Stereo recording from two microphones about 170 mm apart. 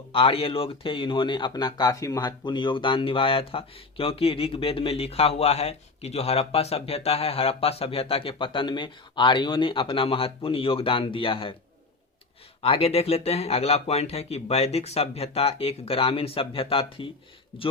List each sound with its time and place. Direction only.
0.1 s speech: 35° left (ahead or behind)
12.6 s speech: 35° left (ahead or behind)